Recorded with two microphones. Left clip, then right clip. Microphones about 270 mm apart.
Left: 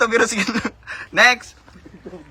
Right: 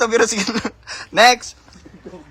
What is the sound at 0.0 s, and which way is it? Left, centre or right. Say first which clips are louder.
A man's voice: right 1 dB; centre.